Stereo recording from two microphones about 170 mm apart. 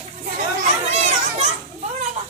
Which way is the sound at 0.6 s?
40° right (ahead or behind).